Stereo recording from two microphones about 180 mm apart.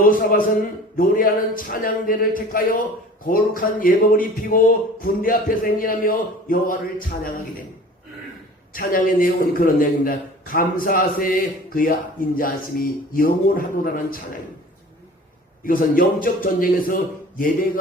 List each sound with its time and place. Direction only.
0.0 s speech: 50° left (ahead or behind)
8.7 s speech: 50° left (ahead or behind)
15.6 s speech: 50° left (ahead or behind)